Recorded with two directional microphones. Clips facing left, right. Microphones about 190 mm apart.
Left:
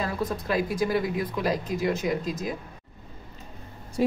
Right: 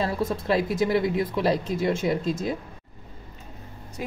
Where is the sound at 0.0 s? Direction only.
25° right (ahead or behind).